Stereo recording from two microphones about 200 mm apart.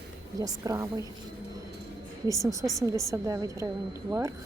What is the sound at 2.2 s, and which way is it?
Speech, 15° right (ahead or behind).